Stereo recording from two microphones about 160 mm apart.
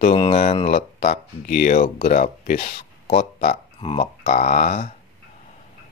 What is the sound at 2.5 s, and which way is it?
Speech, 35° left (ahead or behind).